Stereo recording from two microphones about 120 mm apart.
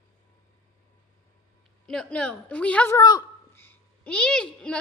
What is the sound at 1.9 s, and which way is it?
A woman's voice, 5° left (ahead or behind).